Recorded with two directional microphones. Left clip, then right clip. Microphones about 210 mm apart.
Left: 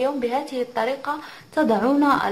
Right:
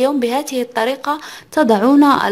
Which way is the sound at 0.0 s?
50° right (ahead or behind).